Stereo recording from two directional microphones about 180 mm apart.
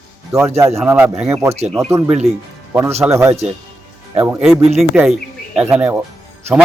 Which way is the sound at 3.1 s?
15° right (ahead or behind).